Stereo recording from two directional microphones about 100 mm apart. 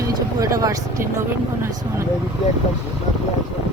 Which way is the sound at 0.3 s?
35° right (ahead or behind).